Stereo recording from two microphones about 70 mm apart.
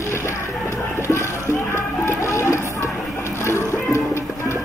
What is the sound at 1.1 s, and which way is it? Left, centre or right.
Music, left.